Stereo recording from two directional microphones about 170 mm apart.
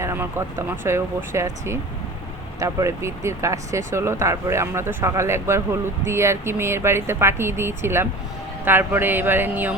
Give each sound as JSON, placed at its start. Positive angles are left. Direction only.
{"t": 0.0, "sound": "speech", "side_deg": -15}